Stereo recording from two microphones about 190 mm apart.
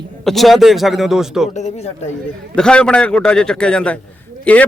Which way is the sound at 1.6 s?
35° left (ahead or behind).